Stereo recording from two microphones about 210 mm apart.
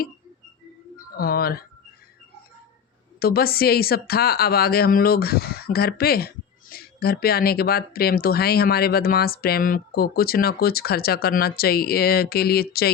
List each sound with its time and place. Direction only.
0.9 s speech: 45° left (ahead or behind)
3.2 s a woman's voice: 45° left (ahead or behind)